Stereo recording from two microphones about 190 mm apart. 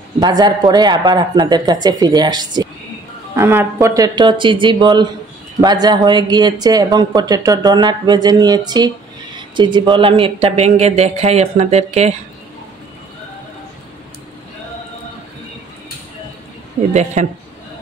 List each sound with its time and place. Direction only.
0.2 s speech: 20° right (ahead or behind)
16.9 s speech: 40° right (ahead or behind)